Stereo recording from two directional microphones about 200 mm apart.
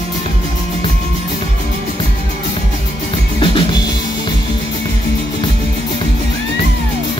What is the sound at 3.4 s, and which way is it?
Music, 25° left (ahead or behind).